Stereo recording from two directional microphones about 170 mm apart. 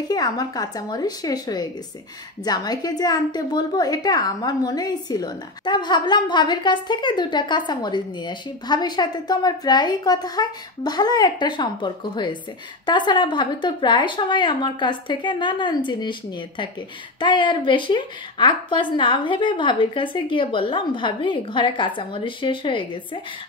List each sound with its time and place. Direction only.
0.1 s a woman's voice: 25° left (ahead or behind)